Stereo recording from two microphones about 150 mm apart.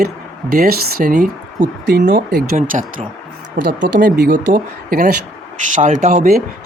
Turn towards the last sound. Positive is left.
turn(degrees=-50)  # may be behind; listen again after turning